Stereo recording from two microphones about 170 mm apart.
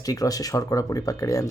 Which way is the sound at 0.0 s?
20° left (ahead or behind).